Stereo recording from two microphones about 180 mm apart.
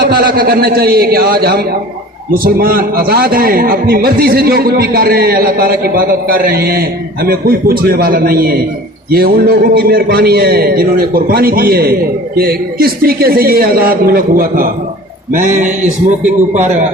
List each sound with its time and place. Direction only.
0.0 s a man's voice: 55° right (ahead or behind)